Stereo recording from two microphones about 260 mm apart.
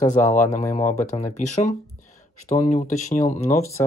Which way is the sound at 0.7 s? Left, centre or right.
Left.